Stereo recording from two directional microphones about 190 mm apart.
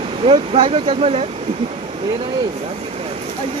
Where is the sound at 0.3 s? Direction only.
30° right (ahead or behind).